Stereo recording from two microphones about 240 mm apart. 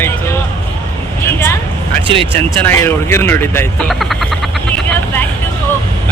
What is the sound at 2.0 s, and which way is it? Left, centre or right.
Speech, right.